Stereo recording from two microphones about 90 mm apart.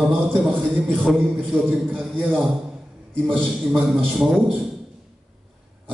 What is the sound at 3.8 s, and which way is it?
Speech, 5° right (ahead or behind).